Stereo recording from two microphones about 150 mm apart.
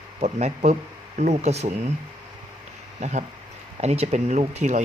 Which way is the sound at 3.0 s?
50° right (ahead or behind).